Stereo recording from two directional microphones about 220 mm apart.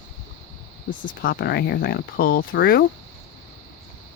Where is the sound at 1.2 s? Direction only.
45° left (ahead or behind).